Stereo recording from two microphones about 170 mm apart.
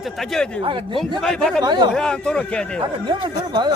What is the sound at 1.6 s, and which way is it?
Speech, 25° right (ahead or behind).